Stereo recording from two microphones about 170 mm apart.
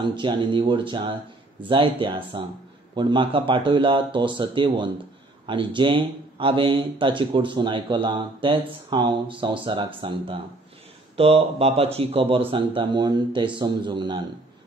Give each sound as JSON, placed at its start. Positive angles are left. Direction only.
{"t": 0.0, "sound": "a man's voice", "side_deg": -25}